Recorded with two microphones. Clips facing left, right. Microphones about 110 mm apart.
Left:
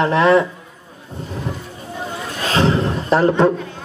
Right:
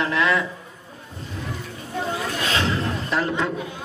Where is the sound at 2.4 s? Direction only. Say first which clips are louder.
Left 9 dB; 35° left (ahead or behind).